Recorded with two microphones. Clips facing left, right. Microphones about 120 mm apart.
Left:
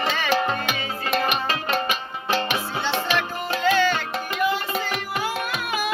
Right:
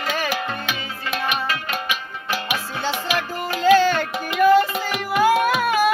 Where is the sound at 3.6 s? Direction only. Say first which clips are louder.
Right 6 dB; 45° right (ahead or behind).